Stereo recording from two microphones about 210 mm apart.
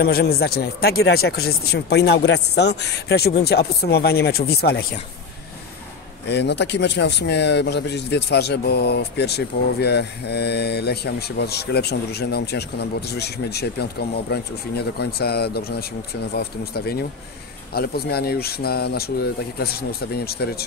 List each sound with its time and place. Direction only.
0.0 s speech: 45° left (ahead or behind)
6.2 s speech: 55° left (ahead or behind)